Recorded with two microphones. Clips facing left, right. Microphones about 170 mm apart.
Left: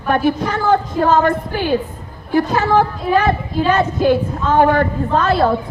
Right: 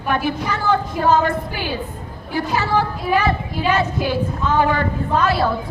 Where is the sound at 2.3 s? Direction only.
50° left (ahead or behind).